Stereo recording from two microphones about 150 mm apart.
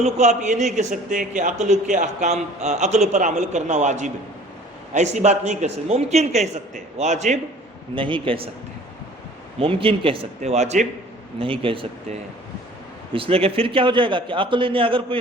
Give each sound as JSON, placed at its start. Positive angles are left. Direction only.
{"t": 0.0, "sound": "a man's voice", "side_deg": -50}
{"t": 7.9, "sound": "a man's voice", "side_deg": -35}
{"t": 9.6, "sound": "a man's voice", "side_deg": -35}
{"t": 11.3, "sound": "a man's voice", "side_deg": -35}